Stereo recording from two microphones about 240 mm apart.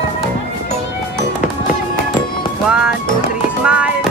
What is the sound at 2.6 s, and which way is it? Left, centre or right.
Music, centre.